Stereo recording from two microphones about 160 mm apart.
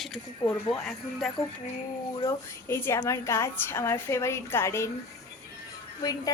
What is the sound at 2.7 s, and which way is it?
A woman's voice, 15° left (ahead or behind).